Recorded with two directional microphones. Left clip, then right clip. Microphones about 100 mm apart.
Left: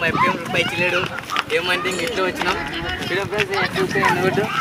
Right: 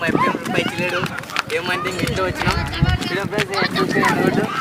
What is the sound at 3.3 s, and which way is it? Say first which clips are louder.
Speech: right 1 dB; 25° right (ahead or behind).